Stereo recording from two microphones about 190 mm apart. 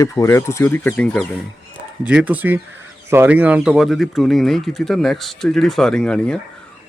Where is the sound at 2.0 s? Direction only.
5° right (ahead or behind).